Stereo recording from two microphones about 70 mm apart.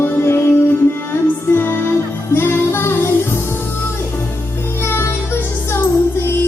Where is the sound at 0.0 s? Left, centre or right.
Left.